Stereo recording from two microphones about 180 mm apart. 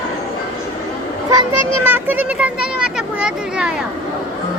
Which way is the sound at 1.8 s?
10° right (ahead or behind).